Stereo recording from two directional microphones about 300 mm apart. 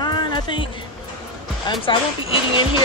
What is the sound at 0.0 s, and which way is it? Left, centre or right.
Music, centre.